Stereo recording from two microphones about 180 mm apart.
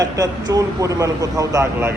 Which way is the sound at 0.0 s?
20° right (ahead or behind).